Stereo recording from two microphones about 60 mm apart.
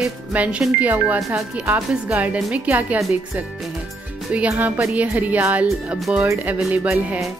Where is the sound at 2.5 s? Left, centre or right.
Right.